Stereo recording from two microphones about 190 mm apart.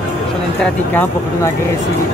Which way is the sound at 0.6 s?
10° left (ahead or behind).